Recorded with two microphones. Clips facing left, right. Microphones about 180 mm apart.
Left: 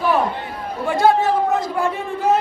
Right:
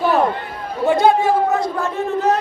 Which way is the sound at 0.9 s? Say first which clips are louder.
Right 2 dB; 20° right (ahead or behind).